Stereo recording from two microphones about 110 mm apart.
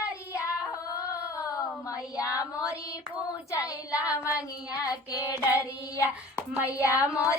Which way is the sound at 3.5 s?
30° left (ahead or behind).